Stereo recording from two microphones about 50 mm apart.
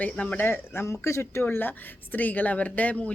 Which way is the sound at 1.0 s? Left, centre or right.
Left.